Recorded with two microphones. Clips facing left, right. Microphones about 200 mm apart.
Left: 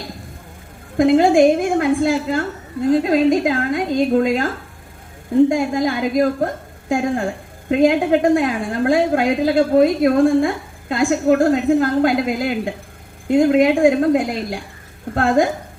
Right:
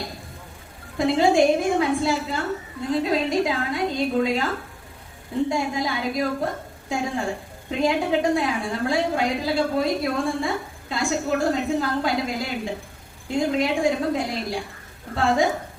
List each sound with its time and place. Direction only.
0.9 s a woman's voice: 50° left (ahead or behind)
5.5 s a woman's voice: 50° left (ahead or behind)